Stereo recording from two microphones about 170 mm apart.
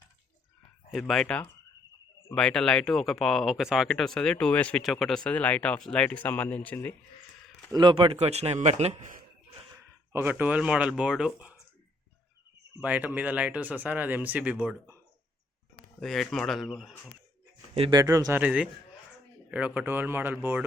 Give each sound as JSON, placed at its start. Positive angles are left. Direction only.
{"t": 0.9, "sound": "speech", "side_deg": 0}
{"t": 7.7, "sound": "a man's voice", "side_deg": -25}
{"t": 10.1, "sound": "speech", "side_deg": -15}
{"t": 12.8, "sound": "speech", "side_deg": -10}
{"t": 16.0, "sound": "speech", "side_deg": 0}
{"t": 17.7, "sound": "speech", "side_deg": -25}